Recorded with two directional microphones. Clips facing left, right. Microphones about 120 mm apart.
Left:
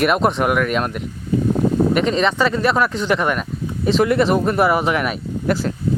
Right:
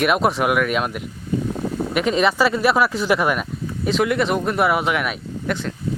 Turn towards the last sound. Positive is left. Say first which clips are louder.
# left 4 dB
turn(degrees=0)  # may be behind; listen again after turning